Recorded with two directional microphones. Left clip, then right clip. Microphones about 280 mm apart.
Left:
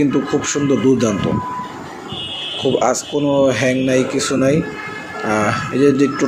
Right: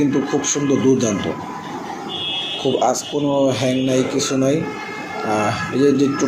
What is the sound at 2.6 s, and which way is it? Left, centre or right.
Speech, left.